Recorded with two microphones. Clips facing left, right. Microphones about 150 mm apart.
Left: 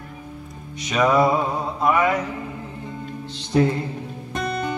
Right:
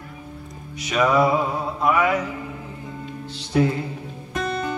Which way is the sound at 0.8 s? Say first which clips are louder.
Left 1 dB; 5° right (ahead or behind).